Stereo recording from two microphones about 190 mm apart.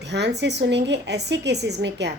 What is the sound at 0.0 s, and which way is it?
A woman's voice, 65° right (ahead or behind).